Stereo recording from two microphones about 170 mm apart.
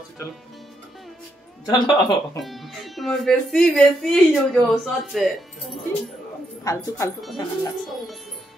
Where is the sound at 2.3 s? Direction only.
Centre (ahead or behind).